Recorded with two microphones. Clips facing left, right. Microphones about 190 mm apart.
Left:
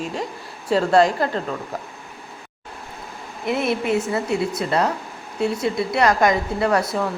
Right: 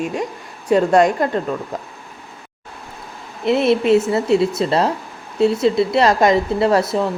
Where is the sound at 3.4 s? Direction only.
25° right (ahead or behind).